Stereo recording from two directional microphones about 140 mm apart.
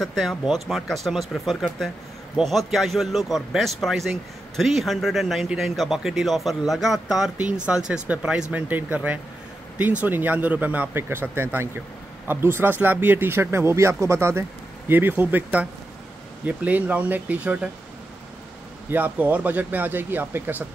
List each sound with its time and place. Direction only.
0.0 s a man's voice: centre (ahead or behind)
18.9 s speech: 15° right (ahead or behind)